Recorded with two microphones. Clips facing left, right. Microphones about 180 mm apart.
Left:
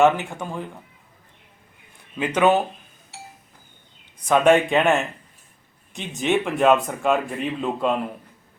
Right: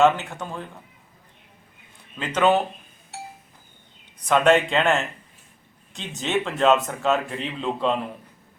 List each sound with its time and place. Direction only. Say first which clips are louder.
0.0 s speech: left 1 dB; 15° left (ahead or behind)
2.1 s speech: left 2 dB; 10° left (ahead or behind)
4.3 s speech: left 2 dB; 15° left (ahead or behind)